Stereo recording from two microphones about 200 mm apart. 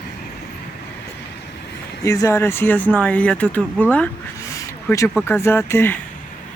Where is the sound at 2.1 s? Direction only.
15° left (ahead or behind).